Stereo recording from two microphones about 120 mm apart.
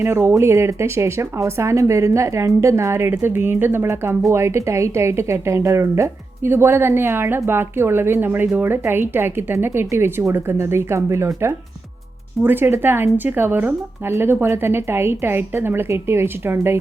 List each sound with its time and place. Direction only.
0.0 s speech: 20° right (ahead or behind)